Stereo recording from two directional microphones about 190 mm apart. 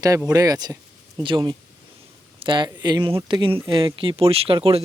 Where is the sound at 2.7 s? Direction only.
20° right (ahead or behind).